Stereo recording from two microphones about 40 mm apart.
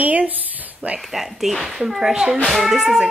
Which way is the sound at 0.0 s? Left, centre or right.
Right.